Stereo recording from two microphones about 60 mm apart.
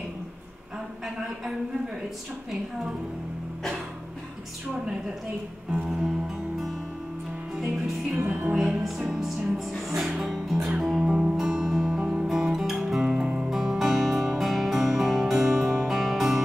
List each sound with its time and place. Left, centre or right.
1.0 s a woman's voice: centre
5.7 s music: centre
8.3 s music: right
8.8 s music: centre